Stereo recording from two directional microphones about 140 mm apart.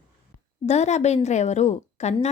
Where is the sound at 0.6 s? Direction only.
55° left (ahead or behind).